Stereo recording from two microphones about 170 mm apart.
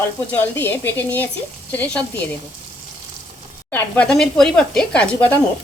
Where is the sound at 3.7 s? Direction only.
10° left (ahead or behind).